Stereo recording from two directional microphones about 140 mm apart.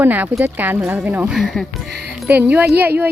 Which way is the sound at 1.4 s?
Centre (ahead or behind).